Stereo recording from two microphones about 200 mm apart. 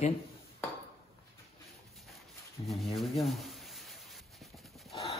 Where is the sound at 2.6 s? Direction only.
25° left (ahead or behind).